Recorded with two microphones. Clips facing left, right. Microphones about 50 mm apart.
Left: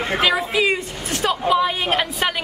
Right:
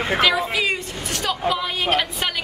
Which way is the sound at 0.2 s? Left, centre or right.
Centre.